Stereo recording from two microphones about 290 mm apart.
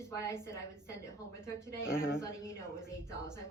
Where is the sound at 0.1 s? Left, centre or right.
Centre.